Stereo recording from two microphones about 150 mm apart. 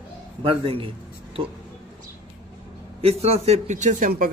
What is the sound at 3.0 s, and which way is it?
A man's voice, 40° right (ahead or behind).